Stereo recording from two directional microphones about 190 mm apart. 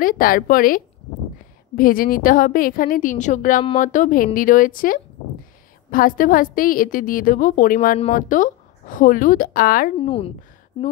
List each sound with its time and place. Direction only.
0.0 s a woman's voice: 50° left (ahead or behind)
9.9 s speech: 30° left (ahead or behind)